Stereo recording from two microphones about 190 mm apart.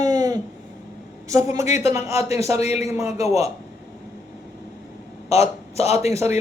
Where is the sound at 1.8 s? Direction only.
15° right (ahead or behind).